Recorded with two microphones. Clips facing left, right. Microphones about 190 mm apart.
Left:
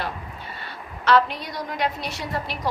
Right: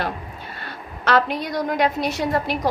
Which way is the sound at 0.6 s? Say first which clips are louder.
Right 1 dB; 45° right (ahead or behind).